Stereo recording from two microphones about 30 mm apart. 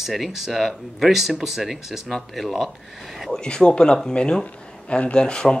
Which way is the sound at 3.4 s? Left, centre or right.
Left.